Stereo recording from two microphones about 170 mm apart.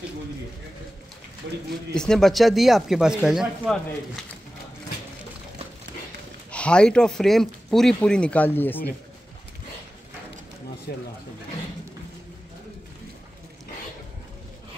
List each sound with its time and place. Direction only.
1.4 s speech: 90° right
2.0 s speech: 5° left (ahead or behind)
6.5 s speech: 5° left (ahead or behind)
10.9 s speech: 65° left (ahead or behind)